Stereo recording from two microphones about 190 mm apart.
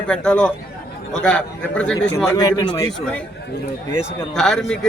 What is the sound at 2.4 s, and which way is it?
Speech, 20° left (ahead or behind).